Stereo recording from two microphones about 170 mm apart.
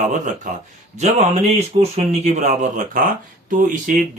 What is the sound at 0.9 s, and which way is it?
Speech, 40° right (ahead or behind).